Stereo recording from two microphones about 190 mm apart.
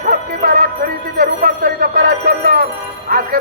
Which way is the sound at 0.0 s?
50° right (ahead or behind).